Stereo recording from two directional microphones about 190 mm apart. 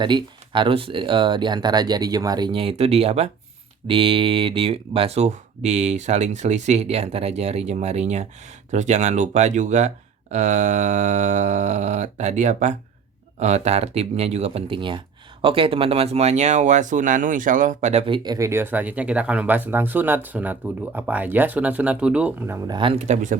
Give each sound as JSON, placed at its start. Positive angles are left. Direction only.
{"t": 0.0, "sound": "speech", "side_deg": -25}